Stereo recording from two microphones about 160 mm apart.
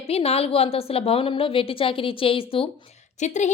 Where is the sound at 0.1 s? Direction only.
40° left (ahead or behind).